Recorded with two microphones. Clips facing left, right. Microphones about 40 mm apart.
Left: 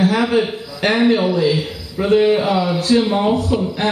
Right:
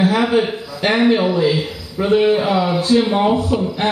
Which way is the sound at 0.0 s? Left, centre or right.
Right.